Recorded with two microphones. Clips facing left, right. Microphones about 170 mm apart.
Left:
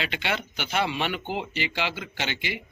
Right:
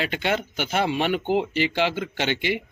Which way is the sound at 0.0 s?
45° right (ahead or behind).